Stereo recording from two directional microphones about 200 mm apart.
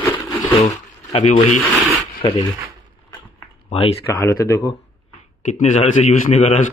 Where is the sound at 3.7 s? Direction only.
30° left (ahead or behind).